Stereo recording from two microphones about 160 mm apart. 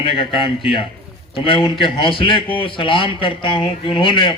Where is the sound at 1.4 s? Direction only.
35° left (ahead or behind).